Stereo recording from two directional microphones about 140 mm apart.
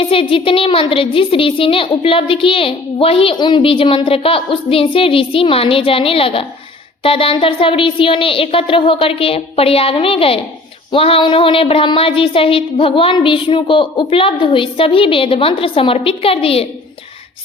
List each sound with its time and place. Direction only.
0.0 s a woman's voice: 40° left (ahead or behind)